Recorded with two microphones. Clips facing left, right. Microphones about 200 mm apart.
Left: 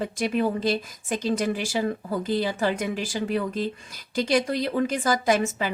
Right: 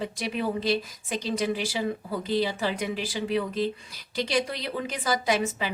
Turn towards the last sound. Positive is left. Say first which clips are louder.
# left 3 dB
turn(degrees=50)  # may be behind; listen again after turning